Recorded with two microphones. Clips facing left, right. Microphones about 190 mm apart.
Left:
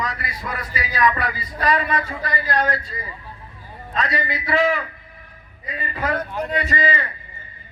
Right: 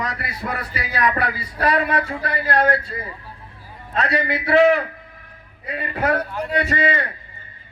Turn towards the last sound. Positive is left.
turn(degrees=-60)  # may be behind; listen again after turning